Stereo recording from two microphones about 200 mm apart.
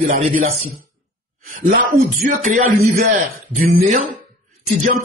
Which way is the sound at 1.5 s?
40° right (ahead or behind).